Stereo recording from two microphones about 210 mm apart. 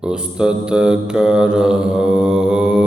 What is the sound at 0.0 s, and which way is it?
Mantra, 5° right (ahead or behind).